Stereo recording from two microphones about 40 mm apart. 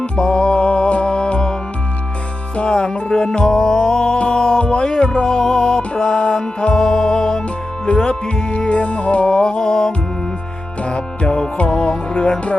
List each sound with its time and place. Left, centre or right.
0.0 s music: left
2.6 s music: left
8.0 s music: left
10.8 s music: left